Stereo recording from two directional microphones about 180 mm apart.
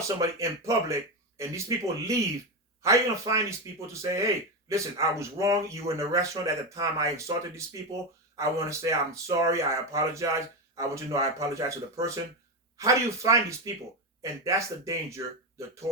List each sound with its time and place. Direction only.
0.2 s speech: 15° right (ahead or behind)